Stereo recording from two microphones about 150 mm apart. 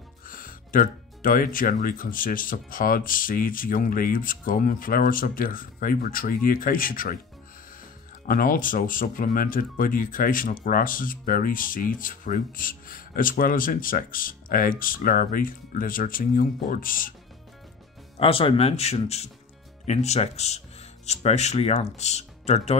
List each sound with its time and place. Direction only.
0.3 s speech: 70° left (ahead or behind)
8.3 s speech: 70° left (ahead or behind)
18.2 s speech: 40° left (ahead or behind)